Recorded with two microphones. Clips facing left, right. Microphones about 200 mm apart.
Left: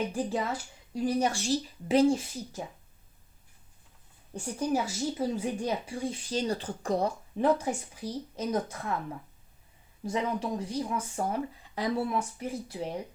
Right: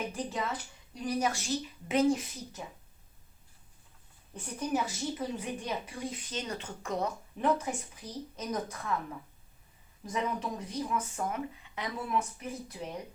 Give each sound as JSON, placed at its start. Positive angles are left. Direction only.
{"t": 0.1, "sound": "speech", "side_deg": 30}
{"t": 4.4, "sound": "speech", "side_deg": 30}
{"t": 10.0, "sound": "speech", "side_deg": 30}